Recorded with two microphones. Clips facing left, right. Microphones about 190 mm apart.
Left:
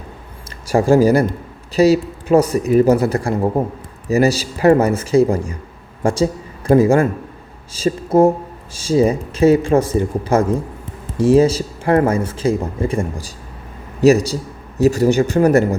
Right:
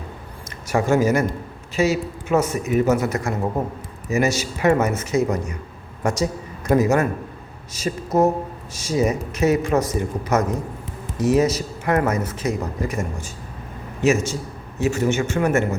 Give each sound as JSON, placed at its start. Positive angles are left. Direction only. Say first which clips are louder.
{"t": 0.7, "sound": "speech", "louder": "left 6 dB", "side_deg": 35}